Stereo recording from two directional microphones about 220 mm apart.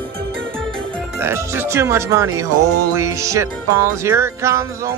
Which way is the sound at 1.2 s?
10° right (ahead or behind).